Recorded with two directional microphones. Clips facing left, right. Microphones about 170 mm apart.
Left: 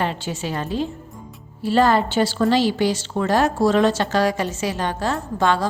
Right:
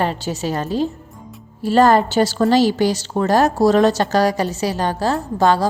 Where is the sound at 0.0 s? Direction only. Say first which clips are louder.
Right 4 dB; 40° right (ahead or behind).